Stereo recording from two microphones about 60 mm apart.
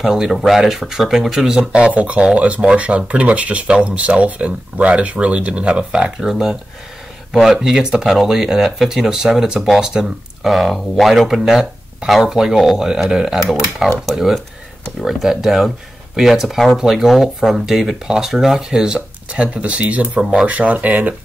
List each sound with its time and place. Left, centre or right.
0.0 s speech: centre
10.5 s speech: centre; by 21.1 s right